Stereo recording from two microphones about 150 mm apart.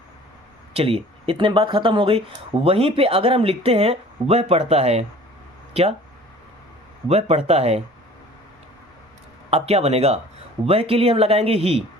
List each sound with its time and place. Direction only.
0.7 s speech: 40° right (ahead or behind)
7.1 s speech: 45° right (ahead or behind)
9.5 s speech: 45° right (ahead or behind)